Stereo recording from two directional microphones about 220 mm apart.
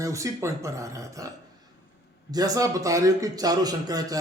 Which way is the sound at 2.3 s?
15° right (ahead or behind).